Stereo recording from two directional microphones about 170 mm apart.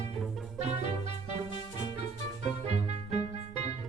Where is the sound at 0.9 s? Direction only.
40° right (ahead or behind).